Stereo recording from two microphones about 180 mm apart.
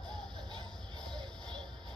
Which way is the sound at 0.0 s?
5° left (ahead or behind).